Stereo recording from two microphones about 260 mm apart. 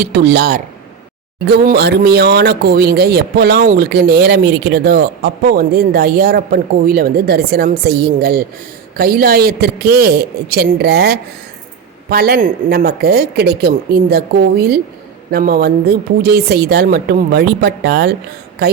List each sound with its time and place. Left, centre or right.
0.0 s speech: right
1.6 s speech: right